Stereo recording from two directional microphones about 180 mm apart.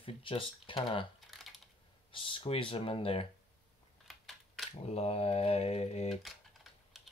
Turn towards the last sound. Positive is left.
turn(degrees=35)  # may be behind; listen again after turning